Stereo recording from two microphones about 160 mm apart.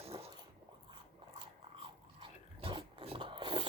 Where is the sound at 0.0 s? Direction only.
40° right (ahead or behind).